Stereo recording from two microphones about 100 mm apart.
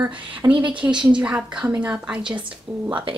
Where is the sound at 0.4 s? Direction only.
35° right (ahead or behind).